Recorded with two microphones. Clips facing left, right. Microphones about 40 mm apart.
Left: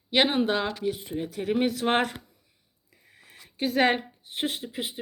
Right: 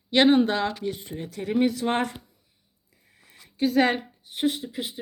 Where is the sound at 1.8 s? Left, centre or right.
Left.